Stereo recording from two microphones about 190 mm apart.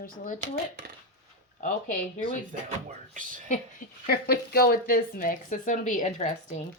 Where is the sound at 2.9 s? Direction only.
45° right (ahead or behind).